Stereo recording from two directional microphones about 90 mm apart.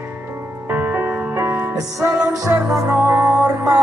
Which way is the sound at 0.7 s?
25° right (ahead or behind).